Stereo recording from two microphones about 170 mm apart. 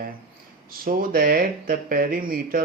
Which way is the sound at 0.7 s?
60° right (ahead or behind).